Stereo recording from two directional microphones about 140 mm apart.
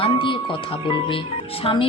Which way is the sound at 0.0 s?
40° left (ahead or behind).